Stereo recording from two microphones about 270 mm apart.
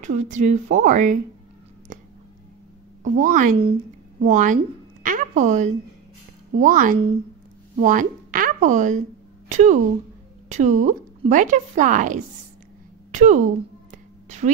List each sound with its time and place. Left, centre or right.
0.0 s a woman's voice: right
3.0 s a woman's voice: right